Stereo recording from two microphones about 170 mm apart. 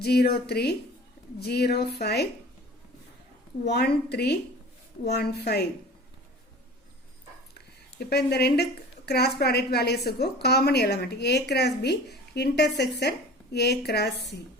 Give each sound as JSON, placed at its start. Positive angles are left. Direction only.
{"t": 0.0, "sound": "a woman's voice", "side_deg": 65}
{"t": 3.7, "sound": "a woman's voice", "side_deg": 75}
{"t": 7.9, "sound": "a woman's voice", "side_deg": 75}